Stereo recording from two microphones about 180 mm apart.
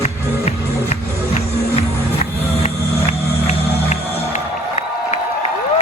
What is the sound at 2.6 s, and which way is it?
Music, 40° left (ahead or behind).